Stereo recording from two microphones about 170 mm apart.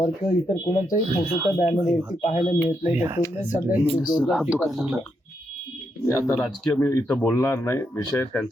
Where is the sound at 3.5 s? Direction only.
45° left (ahead or behind).